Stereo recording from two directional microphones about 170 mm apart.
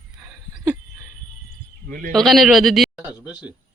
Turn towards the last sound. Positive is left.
turn(degrees=-5)  # may be behind; listen again after turning